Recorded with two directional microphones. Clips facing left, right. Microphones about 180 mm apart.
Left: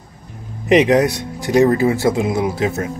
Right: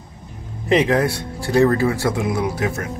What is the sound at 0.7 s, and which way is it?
Speech, 20° left (ahead or behind).